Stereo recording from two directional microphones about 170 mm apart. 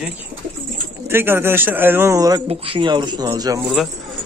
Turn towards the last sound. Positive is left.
turn(degrees=-20)  # may be behind; listen again after turning